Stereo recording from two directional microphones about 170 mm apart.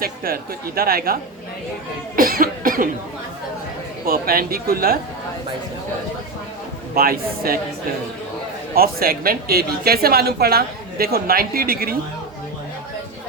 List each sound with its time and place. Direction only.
0.3 s speech: 60° right (ahead or behind)
4.0 s speech: 60° right (ahead or behind)
6.9 s speech: 60° right (ahead or behind)
8.7 s speech: 60° right (ahead or behind)